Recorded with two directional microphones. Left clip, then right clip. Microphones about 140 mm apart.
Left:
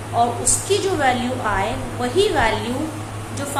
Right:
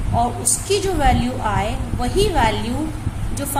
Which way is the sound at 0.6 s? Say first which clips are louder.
Even; 55° right (ahead or behind).